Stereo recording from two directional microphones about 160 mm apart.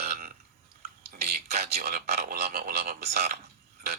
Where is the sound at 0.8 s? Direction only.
75° right (ahead or behind).